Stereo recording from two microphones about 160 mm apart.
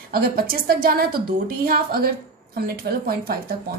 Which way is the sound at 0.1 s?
65° right (ahead or behind).